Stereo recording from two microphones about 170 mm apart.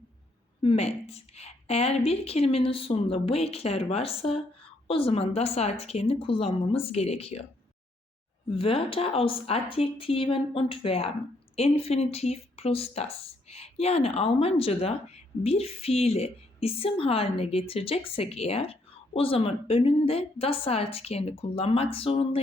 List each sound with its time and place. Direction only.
0.6 s speech: 35° left (ahead or behind)
8.5 s speech: 35° left (ahead or behind)